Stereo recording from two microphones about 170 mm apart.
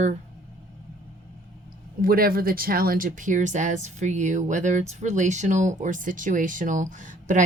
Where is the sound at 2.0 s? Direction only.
60° right (ahead or behind).